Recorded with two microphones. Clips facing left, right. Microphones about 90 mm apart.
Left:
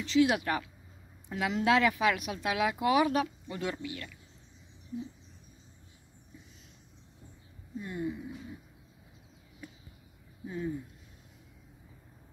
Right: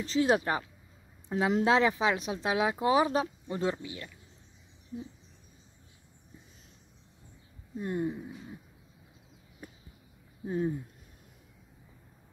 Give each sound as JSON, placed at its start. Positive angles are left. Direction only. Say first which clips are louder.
{"t": 0.0, "sound": "speech", "louder": "even", "side_deg": -35}
{"t": 7.8, "sound": "speech", "louder": "right 4 dB", "side_deg": -40}
{"t": 9.6, "sound": "a sound", "louder": "even", "side_deg": -45}
{"t": 10.4, "sound": "speech", "louder": "right 6 dB", "side_deg": -40}